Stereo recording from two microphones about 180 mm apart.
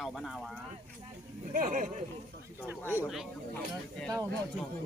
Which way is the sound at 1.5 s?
45° right (ahead or behind).